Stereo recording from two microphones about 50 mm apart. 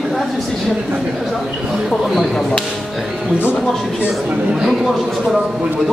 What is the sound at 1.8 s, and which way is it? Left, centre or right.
Speech, centre.